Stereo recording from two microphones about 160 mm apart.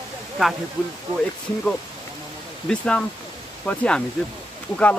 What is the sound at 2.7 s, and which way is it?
Speech, 5° left (ahead or behind).